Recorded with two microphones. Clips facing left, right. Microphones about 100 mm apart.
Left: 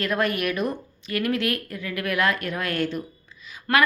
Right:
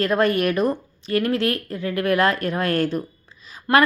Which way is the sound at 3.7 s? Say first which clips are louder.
Right 4 dB; 20° right (ahead or behind).